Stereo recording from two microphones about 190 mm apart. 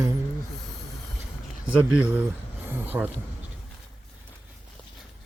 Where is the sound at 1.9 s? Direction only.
5° right (ahead or behind).